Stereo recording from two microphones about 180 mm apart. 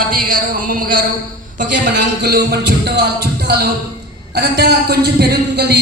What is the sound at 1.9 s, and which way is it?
Speech, 60° right (ahead or behind).